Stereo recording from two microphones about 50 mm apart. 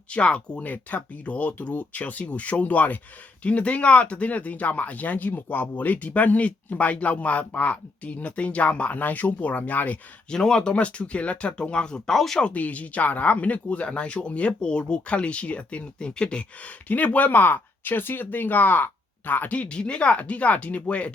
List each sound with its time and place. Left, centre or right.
0.1 s speech: left
10.2 s speech: centre
12.1 s speech: centre
12.4 s speech: left